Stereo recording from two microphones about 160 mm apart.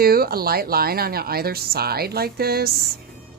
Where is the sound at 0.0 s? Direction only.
70° right (ahead or behind).